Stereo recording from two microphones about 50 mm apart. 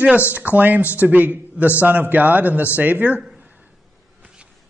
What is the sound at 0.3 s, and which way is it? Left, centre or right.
A man's voice, right.